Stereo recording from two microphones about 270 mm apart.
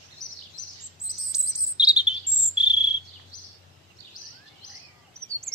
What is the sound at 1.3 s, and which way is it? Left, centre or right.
Cricket, centre.